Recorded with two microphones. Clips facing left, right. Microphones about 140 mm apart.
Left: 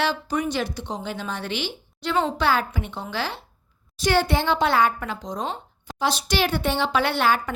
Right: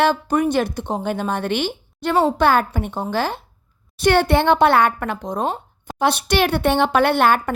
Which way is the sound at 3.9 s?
60° right (ahead or behind).